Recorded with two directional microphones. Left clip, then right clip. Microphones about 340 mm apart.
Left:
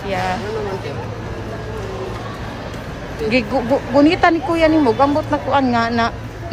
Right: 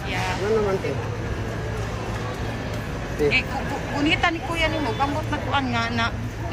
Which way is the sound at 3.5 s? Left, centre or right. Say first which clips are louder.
Left 12 dB; left.